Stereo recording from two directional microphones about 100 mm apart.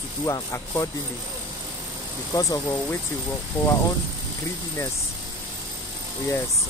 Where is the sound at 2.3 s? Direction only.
35° left (ahead or behind).